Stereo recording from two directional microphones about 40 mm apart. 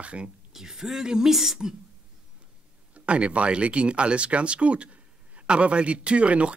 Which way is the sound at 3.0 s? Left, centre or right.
Right.